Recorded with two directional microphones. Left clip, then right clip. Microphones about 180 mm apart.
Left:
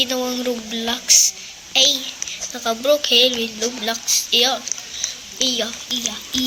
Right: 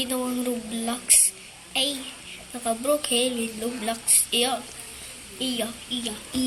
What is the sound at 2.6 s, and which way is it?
A woman's voice, 5° left (ahead or behind).